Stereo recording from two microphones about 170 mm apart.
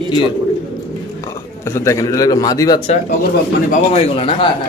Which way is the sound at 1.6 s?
15° left (ahead or behind).